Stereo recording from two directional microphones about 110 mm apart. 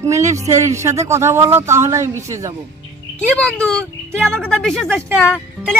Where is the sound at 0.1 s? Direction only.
30° right (ahead or behind).